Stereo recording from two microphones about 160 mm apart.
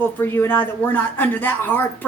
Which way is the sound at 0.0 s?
15° left (ahead or behind).